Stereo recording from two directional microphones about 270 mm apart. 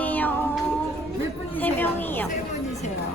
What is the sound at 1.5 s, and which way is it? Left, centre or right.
Speech, centre.